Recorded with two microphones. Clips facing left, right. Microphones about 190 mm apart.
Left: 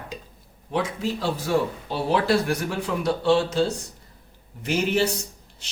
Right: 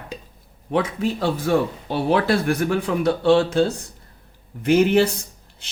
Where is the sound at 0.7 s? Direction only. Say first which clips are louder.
Right 4 dB; 60° right (ahead or behind).